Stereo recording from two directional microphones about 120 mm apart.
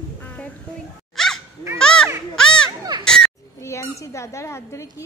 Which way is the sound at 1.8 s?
5° left (ahead or behind).